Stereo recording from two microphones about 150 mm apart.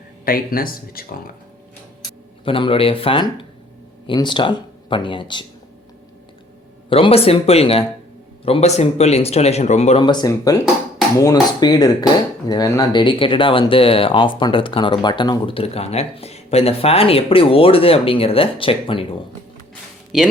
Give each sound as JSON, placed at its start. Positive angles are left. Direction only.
{"t": 0.3, "sound": "speech", "side_deg": 75}
{"t": 2.0, "sound": "speech", "side_deg": 35}
{"t": 6.9, "sound": "speech", "side_deg": 40}
{"t": 10.0, "sound": "speech", "side_deg": 30}
{"t": 20.1, "sound": "speech", "side_deg": -5}